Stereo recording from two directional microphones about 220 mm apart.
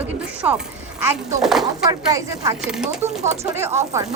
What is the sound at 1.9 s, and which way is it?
Speech, 15° right (ahead or behind).